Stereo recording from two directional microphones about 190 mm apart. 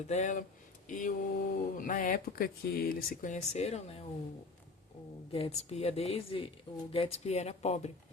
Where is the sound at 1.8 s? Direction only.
45° left (ahead or behind).